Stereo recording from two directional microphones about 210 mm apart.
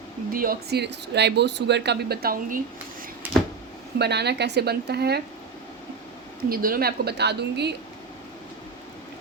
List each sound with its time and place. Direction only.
0.3 s speech: 45° right (ahead or behind)
3.9 s speech: 50° right (ahead or behind)
6.5 s speech: 45° right (ahead or behind)